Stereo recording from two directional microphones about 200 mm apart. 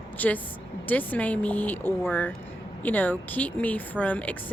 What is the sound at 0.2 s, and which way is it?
Speech, 10° left (ahead or behind).